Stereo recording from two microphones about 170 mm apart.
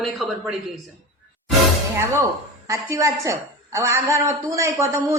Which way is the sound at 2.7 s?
15° right (ahead or behind).